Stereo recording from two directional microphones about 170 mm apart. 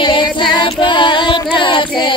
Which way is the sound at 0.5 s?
30° left (ahead or behind).